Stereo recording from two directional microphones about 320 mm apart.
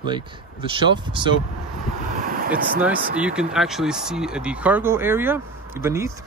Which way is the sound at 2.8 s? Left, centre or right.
Centre.